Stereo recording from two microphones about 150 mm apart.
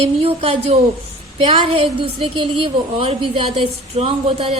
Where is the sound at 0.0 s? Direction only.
40° right (ahead or behind).